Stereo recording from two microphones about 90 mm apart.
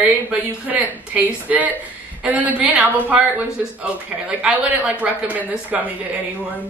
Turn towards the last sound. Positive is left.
turn(degrees=-20)  # may be behind; listen again after turning